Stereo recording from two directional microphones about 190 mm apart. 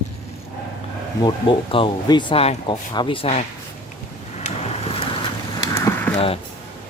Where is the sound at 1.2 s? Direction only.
25° left (ahead or behind).